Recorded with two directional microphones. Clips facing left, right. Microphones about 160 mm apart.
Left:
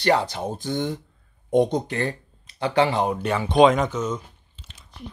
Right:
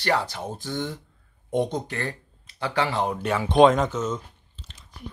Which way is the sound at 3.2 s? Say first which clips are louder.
Even; centre (ahead or behind).